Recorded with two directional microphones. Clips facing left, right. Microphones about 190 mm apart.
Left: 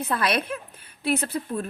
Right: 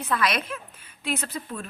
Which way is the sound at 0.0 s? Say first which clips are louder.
Left 1 dB; 30° left (ahead or behind).